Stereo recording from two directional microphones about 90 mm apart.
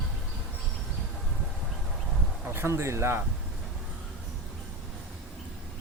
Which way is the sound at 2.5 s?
30° right (ahead or behind).